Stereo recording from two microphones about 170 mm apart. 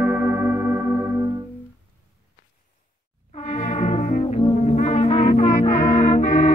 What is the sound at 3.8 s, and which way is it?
Brass instrument, 45° left (ahead or behind).